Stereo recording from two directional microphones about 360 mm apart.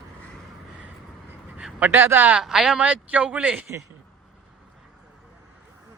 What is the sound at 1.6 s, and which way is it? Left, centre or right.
Speech, centre.